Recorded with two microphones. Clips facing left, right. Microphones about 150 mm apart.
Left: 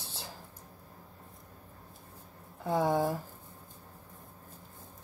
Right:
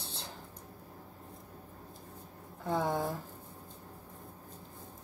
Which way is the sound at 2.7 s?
15° left (ahead or behind).